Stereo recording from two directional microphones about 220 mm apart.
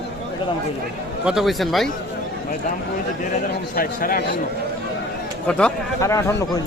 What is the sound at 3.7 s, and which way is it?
Speech, 40° left (ahead or behind).